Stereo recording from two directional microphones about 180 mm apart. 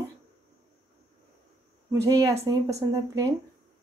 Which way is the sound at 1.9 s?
20° right (ahead or behind).